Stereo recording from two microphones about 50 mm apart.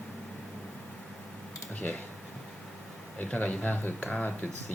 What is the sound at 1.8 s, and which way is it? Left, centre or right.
Speech, left.